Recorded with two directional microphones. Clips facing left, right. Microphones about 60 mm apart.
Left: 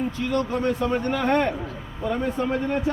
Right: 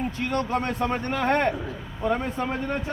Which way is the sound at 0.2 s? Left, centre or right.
Right.